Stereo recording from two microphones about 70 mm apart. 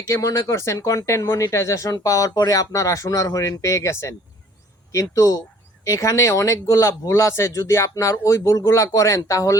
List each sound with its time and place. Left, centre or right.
0.1 s speech: left
0.5 s speech: left